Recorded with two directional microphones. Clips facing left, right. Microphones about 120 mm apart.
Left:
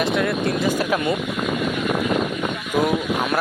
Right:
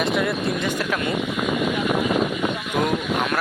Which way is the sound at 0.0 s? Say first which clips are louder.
Left 1 dB; centre (ahead or behind).